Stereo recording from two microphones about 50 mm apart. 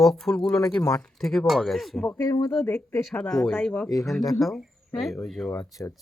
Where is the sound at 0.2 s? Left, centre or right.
Centre.